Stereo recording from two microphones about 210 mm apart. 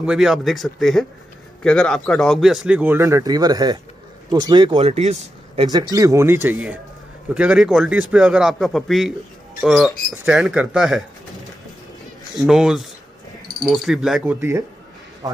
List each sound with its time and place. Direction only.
0.0 s a man's voice: 5° right (ahead or behind); by 5.7 s 30° right (ahead or behind)
5.7 s a man's voice: 15° right (ahead or behind); by 11.1 s centre (ahead or behind)
12.4 s a man's voice: centre (ahead or behind)